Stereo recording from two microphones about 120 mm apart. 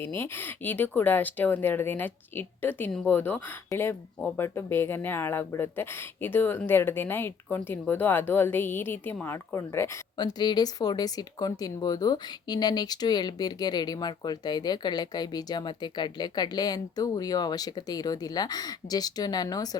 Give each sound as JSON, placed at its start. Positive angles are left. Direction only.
{"t": 0.0, "sound": "speech", "side_deg": 20}
{"t": 10.2, "sound": "speech", "side_deg": 35}